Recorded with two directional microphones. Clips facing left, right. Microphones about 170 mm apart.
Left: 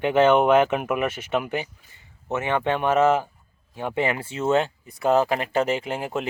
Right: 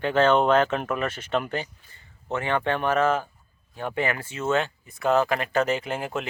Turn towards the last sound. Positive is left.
turn(degrees=20)  # may be behind; listen again after turning